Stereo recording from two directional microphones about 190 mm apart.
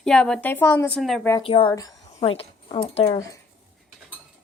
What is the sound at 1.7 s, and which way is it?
Speech, 20° left (ahead or behind).